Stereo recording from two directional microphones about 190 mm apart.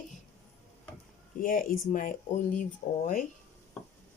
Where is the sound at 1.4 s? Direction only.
45° left (ahead or behind).